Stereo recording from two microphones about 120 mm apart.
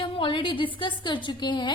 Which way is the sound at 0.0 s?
45° left (ahead or behind).